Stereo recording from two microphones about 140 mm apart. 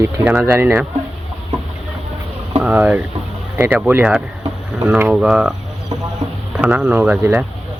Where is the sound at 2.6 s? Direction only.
10° right (ahead or behind).